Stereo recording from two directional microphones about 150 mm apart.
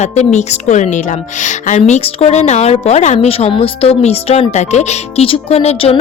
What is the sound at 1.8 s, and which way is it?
A woman's voice, 45° left (ahead or behind).